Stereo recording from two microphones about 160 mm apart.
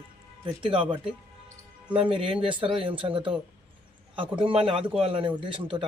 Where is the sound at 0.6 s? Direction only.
35° right (ahead or behind).